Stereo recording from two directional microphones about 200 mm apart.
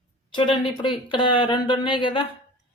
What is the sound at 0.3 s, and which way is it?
A woman's voice, 25° left (ahead or behind).